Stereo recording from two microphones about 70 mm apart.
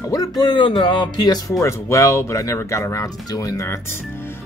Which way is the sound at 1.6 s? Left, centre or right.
Left.